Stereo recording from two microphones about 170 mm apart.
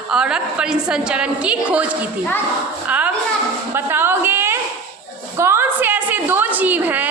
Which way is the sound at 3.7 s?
15° right (ahead or behind).